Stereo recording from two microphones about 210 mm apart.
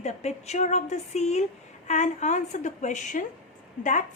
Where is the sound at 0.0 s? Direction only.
30° left (ahead or behind).